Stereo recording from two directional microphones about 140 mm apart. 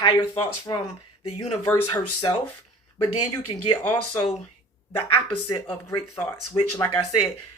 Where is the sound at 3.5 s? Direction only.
35° left (ahead or behind).